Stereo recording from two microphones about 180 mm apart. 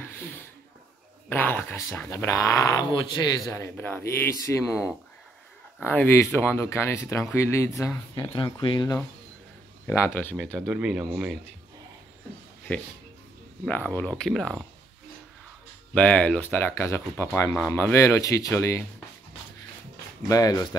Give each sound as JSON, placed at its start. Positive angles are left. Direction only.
{"t": 0.0, "sound": "a sound", "side_deg": 10}
{"t": 1.3, "sound": "speech", "side_deg": 10}
{"t": 5.9, "sound": "speech", "side_deg": 10}
{"t": 9.8, "sound": "speech", "side_deg": 10}
{"t": 10.5, "sound": "speech", "side_deg": -5}
{"t": 12.7, "sound": "speech", "side_deg": 10}
{"t": 15.9, "sound": "speech", "side_deg": 5}
{"t": 20.2, "sound": "speech", "side_deg": 20}